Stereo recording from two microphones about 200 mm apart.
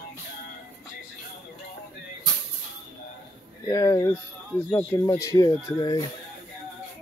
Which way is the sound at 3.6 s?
15° left (ahead or behind).